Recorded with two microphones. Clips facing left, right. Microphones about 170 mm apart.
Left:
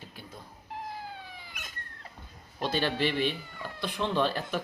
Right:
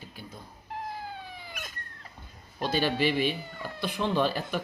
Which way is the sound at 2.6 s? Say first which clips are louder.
Right 2 dB; 5° right (ahead or behind).